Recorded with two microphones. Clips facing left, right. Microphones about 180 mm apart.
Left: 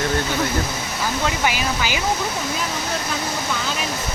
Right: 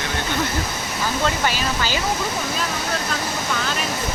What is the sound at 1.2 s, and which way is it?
Speech, 15° left (ahead or behind).